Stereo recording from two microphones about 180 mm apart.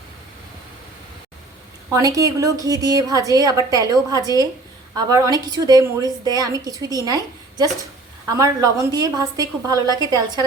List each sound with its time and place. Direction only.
1.9 s a woman's voice: 20° right (ahead or behind)
8.3 s a woman's voice: 20° right (ahead or behind)